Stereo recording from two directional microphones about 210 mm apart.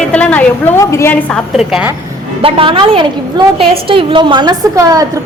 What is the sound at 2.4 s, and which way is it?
A woman's voice, 25° right (ahead or behind).